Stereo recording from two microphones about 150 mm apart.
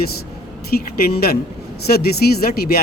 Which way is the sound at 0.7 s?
90° left.